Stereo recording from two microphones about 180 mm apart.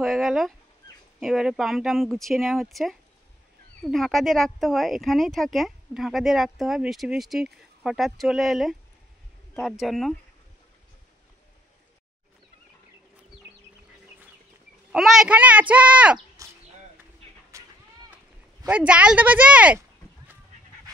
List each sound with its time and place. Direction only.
0.0 s speech: centre (ahead or behind)
14.9 s speech: centre (ahead or behind)
17.5 s a sound: 15° right (ahead or behind)
18.7 s speech: 5° right (ahead or behind)